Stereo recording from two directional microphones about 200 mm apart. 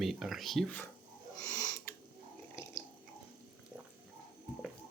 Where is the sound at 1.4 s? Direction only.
15° left (ahead or behind).